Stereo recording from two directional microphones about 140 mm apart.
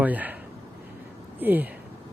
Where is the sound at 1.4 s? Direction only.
15° right (ahead or behind).